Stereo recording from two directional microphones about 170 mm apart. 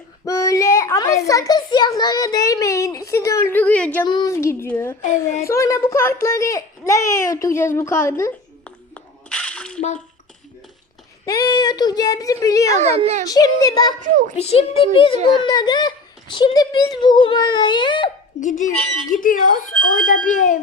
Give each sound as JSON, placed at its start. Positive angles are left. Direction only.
{"t": 0.3, "sound": "a sound", "side_deg": 20}
{"t": 1.3, "sound": "a child's voice", "side_deg": 20}
{"t": 4.0, "sound": "a child's voice", "side_deg": 25}
{"t": 5.0, "sound": "speech", "side_deg": 45}
{"t": 5.5, "sound": "a child's voice", "side_deg": 15}
{"t": 9.0, "sound": "a sound", "side_deg": 5}
{"t": 11.3, "sound": "a child's voice", "side_deg": 25}
{"t": 12.8, "sound": "a child's voice", "side_deg": -40}
{"t": 13.2, "sound": "a child's voice", "side_deg": 20}
{"t": 14.3, "sound": "a child's voice", "side_deg": 35}
{"t": 18.3, "sound": "speech", "side_deg": 50}